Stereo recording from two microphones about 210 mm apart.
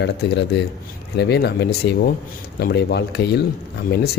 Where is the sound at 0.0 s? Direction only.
55° left (ahead or behind).